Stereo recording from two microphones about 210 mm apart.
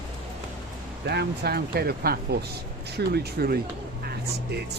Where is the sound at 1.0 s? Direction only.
50° right (ahead or behind).